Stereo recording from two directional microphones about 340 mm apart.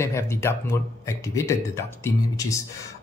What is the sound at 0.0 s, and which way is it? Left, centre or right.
Speech, centre.